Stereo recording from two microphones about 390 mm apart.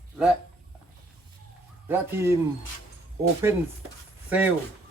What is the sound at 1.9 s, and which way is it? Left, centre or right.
Speech, centre.